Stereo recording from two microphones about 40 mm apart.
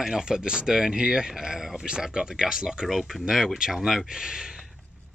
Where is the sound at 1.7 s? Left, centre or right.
Right.